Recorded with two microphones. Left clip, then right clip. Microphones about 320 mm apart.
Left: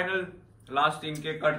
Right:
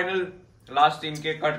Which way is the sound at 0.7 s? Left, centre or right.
Centre.